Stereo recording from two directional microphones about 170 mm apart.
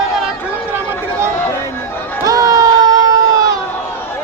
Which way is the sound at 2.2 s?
20° right (ahead or behind).